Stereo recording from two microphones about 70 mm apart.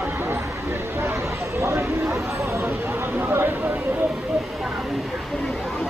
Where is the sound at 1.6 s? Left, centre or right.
Right.